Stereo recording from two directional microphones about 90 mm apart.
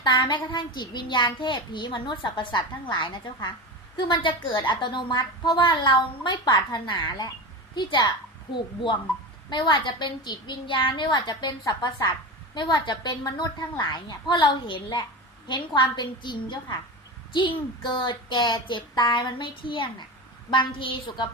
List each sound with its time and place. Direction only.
0.0 s a child's voice: 60° left (ahead or behind)
17.9 s a child's voice: 65° left (ahead or behind)